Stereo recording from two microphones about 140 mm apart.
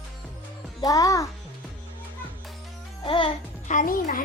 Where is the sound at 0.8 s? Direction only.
25° left (ahead or behind).